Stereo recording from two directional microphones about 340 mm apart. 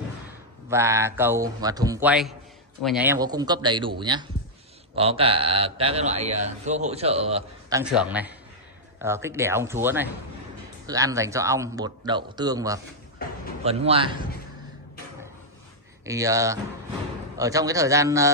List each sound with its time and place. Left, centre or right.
0.7 s a man's voice: centre
7.8 s a man's voice: centre
16.1 s a man's voice: centre